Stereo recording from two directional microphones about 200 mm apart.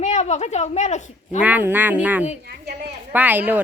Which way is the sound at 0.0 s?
35° left (ahead or behind).